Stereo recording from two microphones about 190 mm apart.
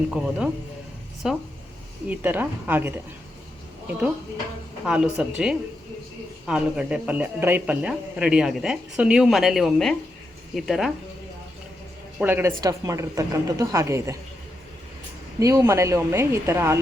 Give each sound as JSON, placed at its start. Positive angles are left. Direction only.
{"t": 0.1, "sound": "a woman's voice", "side_deg": -5}
{"t": 4.9, "sound": "speech", "side_deg": -5}
{"t": 12.2, "sound": "a woman's voice", "side_deg": -10}
{"t": 15.4, "sound": "a woman's voice", "side_deg": -15}